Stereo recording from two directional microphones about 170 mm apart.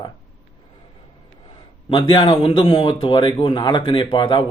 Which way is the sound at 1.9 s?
30° left (ahead or behind).